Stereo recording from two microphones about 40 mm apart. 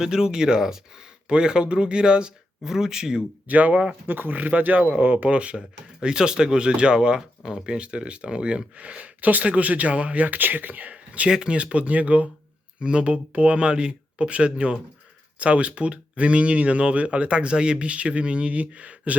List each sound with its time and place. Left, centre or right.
0.0 s speech: centre
2.6 s speech: centre
3.4 s speech: right
4.0 s speech: right
5.3 s speech: right
10.9 s a sound: right
11.3 s speech: right
12.8 s speech: right